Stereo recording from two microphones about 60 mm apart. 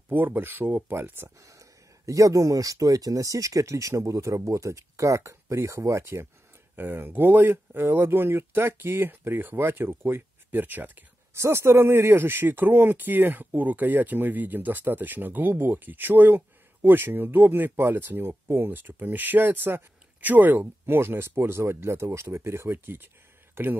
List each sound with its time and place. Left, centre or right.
0.1 s speech: right
1.4 s speech: right
6.8 s speech: right
11.3 s speech: right